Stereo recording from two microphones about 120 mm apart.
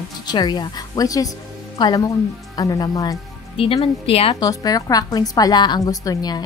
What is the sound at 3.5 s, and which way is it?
Speech, 50° left (ahead or behind).